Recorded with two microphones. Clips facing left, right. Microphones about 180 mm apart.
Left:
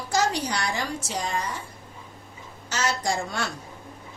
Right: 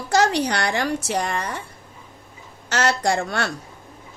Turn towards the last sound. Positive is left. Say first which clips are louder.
# right 5 dB
turn(degrees=-65)  # may be behind; listen again after turning